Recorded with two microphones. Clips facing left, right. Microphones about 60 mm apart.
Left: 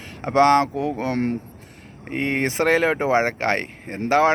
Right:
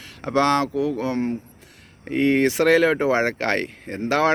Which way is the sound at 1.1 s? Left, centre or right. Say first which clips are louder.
Left 1 dB; left.